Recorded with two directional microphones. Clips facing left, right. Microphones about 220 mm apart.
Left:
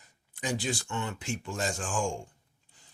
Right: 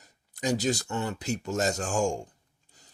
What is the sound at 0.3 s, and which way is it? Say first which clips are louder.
Speech: right 5 dB; 40° right (ahead or behind).